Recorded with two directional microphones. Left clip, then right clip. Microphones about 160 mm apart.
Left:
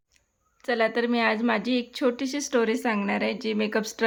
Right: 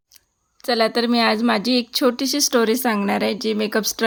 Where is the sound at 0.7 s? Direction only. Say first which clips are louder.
Right 5 dB; 25° right (ahead or behind).